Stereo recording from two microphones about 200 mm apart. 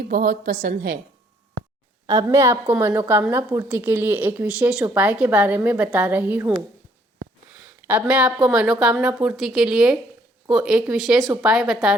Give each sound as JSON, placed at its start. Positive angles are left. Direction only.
{"t": 0.1, "sound": "a woman's voice", "side_deg": -45}
{"t": 2.0, "sound": "a woman's voice", "side_deg": -15}
{"t": 7.9, "sound": "a woman's voice", "side_deg": -5}